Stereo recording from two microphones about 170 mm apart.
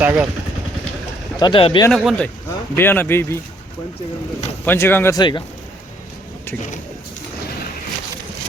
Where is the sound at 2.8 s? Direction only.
10° left (ahead or behind).